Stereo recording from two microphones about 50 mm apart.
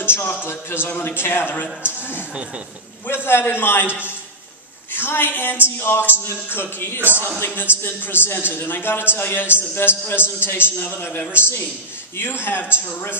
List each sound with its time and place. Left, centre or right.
0.0 s a man's voice: left